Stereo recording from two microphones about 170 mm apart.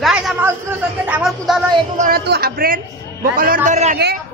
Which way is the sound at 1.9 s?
45° right (ahead or behind).